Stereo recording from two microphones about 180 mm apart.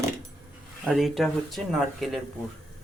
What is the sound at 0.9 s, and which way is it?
Speech, centre (ahead or behind).